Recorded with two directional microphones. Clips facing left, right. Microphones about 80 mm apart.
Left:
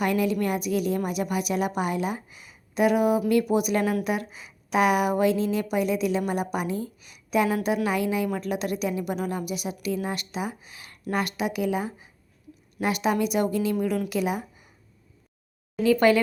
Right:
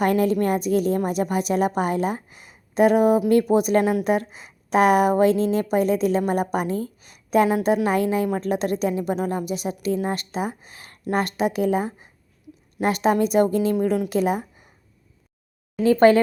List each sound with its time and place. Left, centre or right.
0.0 s a woman's voice: right
15.8 s a woman's voice: right